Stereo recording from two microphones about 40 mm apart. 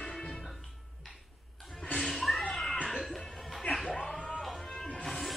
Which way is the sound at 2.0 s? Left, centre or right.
Centre.